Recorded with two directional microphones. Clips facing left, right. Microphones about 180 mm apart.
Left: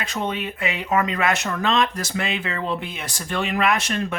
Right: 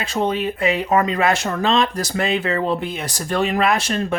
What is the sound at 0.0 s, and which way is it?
Speech, 35° right (ahead or behind).